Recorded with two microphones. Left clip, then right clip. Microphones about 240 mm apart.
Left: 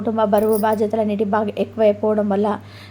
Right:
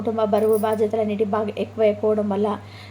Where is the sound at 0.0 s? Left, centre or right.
Centre.